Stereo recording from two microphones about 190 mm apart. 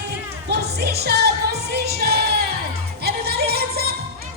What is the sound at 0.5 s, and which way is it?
Music, 60° right (ahead or behind).